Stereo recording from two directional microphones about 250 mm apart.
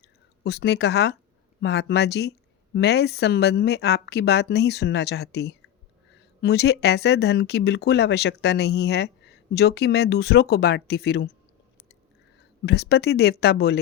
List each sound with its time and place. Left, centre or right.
0.4 s speech: left
12.6 s speech: left